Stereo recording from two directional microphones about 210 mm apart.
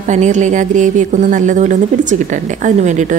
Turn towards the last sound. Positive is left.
turn(degrees=-35)  # may be behind; listen again after turning